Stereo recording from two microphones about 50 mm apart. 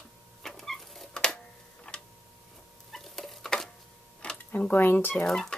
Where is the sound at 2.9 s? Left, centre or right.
Centre.